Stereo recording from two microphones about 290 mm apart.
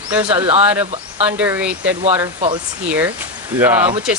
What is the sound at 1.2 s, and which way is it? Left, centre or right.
Speech, centre.